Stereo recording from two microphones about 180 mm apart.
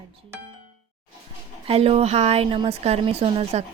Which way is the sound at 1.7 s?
35° right (ahead or behind).